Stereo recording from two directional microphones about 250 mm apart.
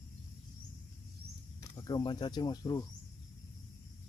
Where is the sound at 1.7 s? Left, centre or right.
Centre.